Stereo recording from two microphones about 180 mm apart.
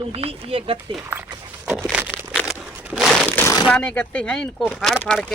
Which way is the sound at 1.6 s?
5° right (ahead or behind).